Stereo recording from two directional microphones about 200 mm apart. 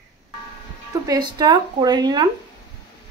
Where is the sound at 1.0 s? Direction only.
20° right (ahead or behind).